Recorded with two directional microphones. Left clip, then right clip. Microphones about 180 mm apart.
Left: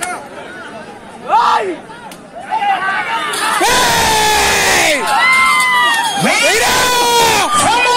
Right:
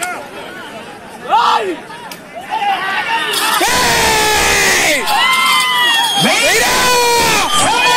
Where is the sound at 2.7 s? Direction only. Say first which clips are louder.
Right 1 dB; 5° left (ahead or behind).